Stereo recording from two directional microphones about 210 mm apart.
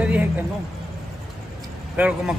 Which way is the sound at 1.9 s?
5° right (ahead or behind).